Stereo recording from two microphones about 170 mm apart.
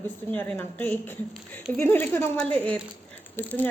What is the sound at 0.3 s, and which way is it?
Speech, 10° left (ahead or behind).